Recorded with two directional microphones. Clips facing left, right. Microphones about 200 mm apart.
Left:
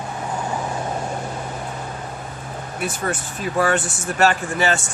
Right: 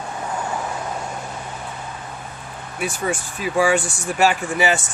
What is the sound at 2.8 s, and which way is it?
Speech, 10° right (ahead or behind).